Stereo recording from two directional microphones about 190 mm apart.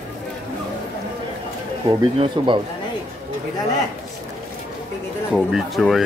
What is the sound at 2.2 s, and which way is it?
Speech, 25° right (ahead or behind).